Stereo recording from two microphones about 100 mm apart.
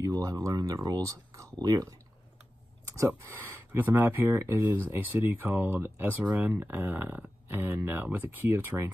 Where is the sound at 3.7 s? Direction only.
20° right (ahead or behind).